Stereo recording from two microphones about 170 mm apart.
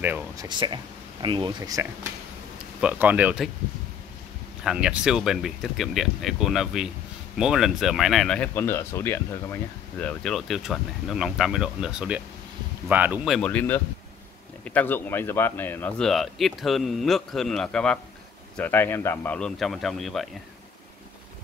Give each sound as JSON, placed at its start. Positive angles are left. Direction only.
{"t": 0.0, "sound": "speech", "side_deg": -10}
{"t": 0.5, "sound": "speech", "side_deg": -30}
{"t": 2.8, "sound": "speech", "side_deg": -10}
{"t": 4.6, "sound": "speech", "side_deg": -5}
{"t": 13.4, "sound": "speech", "side_deg": 10}